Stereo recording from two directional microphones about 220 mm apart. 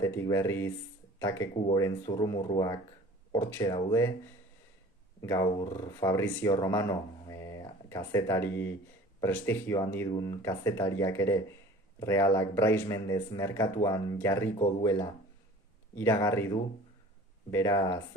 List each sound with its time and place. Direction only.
0.0 s speech: 10° left (ahead or behind)
5.2 s speech: 15° left (ahead or behind)
7.3 s a sound: 15° left (ahead or behind)
9.2 s speech: 10° left (ahead or behind)